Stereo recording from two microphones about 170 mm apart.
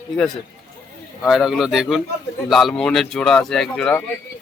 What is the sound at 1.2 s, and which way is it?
Speech, centre (ahead or behind).